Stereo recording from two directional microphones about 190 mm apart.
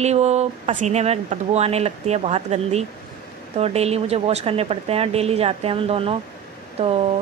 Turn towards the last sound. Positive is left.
turn(degrees=-30)  # may be behind; listen again after turning